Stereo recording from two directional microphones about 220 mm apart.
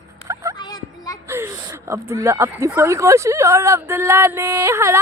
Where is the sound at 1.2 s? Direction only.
10° right (ahead or behind).